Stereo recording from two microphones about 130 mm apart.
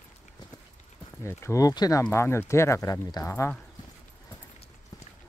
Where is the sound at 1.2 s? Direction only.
20° left (ahead or behind).